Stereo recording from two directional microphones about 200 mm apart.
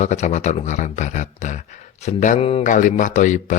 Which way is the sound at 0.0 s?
35° left (ahead or behind).